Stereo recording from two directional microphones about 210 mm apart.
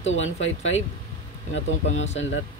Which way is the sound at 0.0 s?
65° left (ahead or behind).